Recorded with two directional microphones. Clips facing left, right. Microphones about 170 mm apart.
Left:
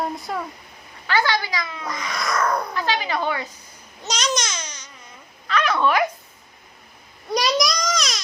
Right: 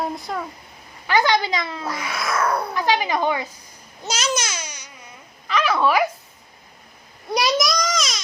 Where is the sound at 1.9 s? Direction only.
5° right (ahead or behind).